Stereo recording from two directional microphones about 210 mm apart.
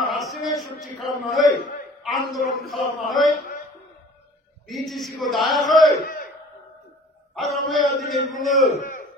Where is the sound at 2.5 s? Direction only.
Centre (ahead or behind).